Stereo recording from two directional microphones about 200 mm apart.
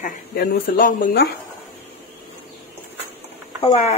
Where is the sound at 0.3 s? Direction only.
45° left (ahead or behind).